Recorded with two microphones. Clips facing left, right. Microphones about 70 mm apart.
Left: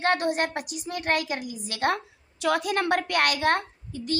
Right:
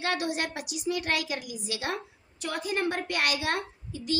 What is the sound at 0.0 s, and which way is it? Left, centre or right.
A woman's voice, left.